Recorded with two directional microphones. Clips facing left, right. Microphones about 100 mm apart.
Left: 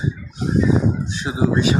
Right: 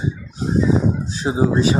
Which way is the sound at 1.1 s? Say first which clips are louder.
Right 3 dB; 35° right (ahead or behind).